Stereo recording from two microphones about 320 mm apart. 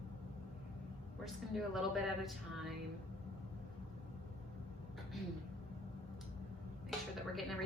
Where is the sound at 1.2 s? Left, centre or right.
Centre.